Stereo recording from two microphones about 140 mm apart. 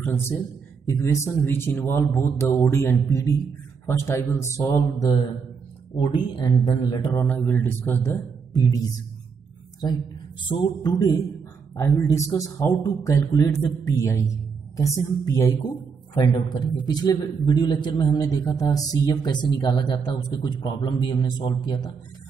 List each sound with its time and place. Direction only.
0.0 s a man's voice: 15° left (ahead or behind)
5.9 s speech: 35° left (ahead or behind)
7.3 s speech: 15° left (ahead or behind)
8.5 s a man's voice: 25° left (ahead or behind)
10.8 s a man's voice: 30° left (ahead or behind)